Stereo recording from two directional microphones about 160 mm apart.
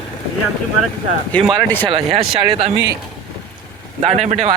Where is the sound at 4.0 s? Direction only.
40° right (ahead or behind).